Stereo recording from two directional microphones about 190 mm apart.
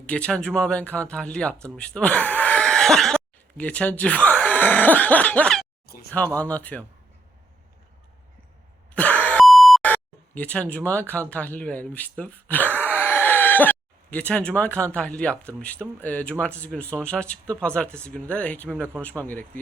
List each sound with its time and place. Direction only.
0.0 s speech: 5° left (ahead or behind)
5.8 s a sound: 55° left (ahead or behind)
6.1 s speech: 5° left (ahead or behind)
9.0 s beep: 5° left (ahead or behind)
14.9 s speech: 5° left (ahead or behind)